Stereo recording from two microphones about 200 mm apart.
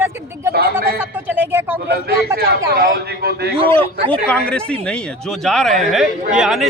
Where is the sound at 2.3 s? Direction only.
50° right (ahead or behind).